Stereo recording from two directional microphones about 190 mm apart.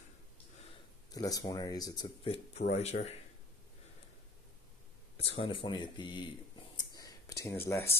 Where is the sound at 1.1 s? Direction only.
20° left (ahead or behind).